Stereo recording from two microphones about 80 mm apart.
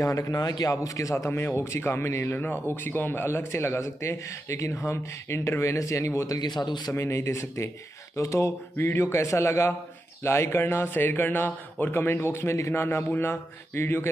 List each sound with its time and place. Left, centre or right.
0.0 s a man's voice: left
6.5 s speech: left
6.9 s a man's voice: left